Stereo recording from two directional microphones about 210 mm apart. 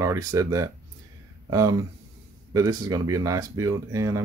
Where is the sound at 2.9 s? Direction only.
15° right (ahead or behind).